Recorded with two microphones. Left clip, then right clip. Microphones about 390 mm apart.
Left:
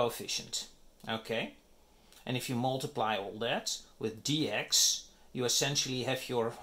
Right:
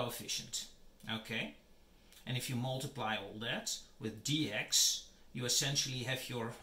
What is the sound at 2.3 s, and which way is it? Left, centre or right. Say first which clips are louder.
Speech: left 7 dB; centre.